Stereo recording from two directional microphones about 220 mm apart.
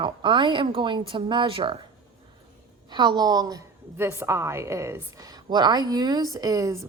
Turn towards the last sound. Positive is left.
turn(degrees=-15)  # may be behind; listen again after turning